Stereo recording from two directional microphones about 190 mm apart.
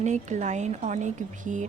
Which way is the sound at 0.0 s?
40° right (ahead or behind).